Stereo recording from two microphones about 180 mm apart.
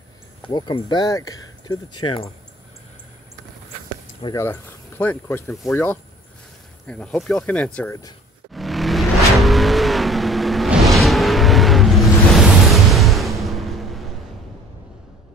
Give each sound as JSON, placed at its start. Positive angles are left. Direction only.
{"t": 0.5, "sound": "speech", "side_deg": 25}
{"t": 4.4, "sound": "speech", "side_deg": 15}
{"t": 8.5, "sound": "vehicle", "side_deg": 0}
{"t": 12.9, "sound": "a sound", "side_deg": 0}